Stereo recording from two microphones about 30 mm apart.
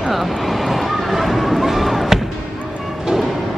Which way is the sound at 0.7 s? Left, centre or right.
Centre.